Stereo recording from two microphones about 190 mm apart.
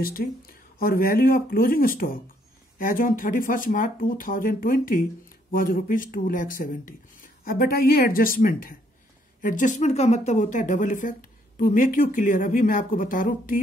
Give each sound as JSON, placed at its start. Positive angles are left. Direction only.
{"t": 0.0, "sound": "speech", "side_deg": 50}